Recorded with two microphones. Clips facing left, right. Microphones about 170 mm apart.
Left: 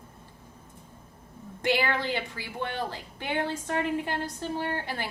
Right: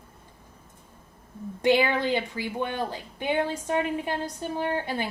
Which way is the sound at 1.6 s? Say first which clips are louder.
Right 5 dB; 20° right (ahead or behind).